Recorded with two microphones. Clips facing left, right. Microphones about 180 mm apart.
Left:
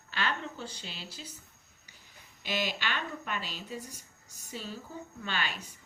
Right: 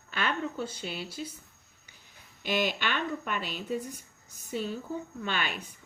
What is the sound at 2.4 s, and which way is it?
Speech, 50° right (ahead or behind).